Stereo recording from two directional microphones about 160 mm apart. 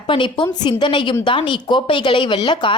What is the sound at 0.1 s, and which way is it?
A woman's voice, 30° left (ahead or behind).